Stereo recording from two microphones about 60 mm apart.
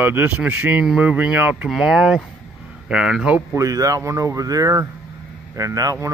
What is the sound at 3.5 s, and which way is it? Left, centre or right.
Speech, right.